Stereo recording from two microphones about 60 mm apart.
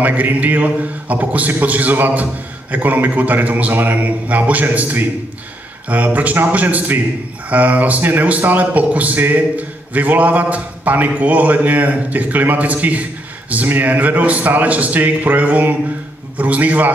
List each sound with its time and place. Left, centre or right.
0.0 s a man's voice: right